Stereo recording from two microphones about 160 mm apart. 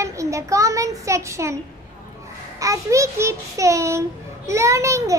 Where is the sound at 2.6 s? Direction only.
20° right (ahead or behind).